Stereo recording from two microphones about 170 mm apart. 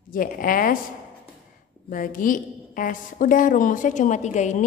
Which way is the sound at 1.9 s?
55° left (ahead or behind).